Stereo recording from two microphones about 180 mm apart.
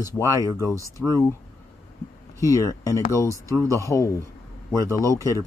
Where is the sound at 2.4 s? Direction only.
15° left (ahead or behind).